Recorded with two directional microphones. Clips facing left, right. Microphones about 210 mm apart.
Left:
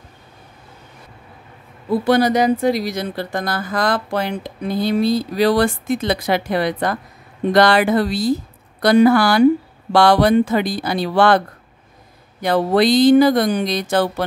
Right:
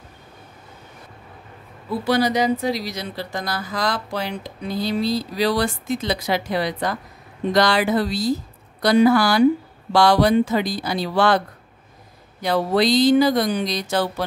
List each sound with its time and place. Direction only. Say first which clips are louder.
1.9 s speech: left 5 dB; 50° left (ahead or behind)